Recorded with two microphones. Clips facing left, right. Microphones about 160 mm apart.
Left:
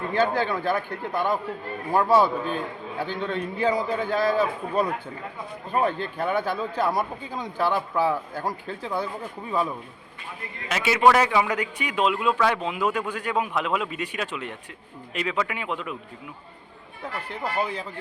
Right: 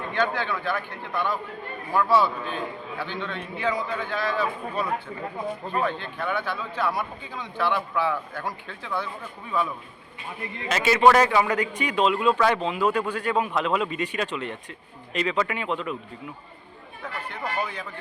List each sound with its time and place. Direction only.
0.1 s a man's voice: 40° left (ahead or behind)
10.7 s a man's voice: 10° left (ahead or behind)
17.0 s speech: 30° left (ahead or behind)